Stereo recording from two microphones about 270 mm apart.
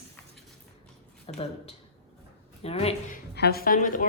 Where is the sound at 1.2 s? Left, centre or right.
Left.